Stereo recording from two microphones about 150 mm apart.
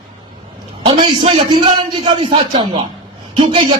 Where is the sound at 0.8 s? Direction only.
40° right (ahead or behind).